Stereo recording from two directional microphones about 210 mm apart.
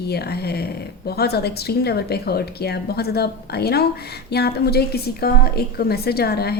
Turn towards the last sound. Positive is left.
turn(degrees=50)  # may be behind; listen again after turning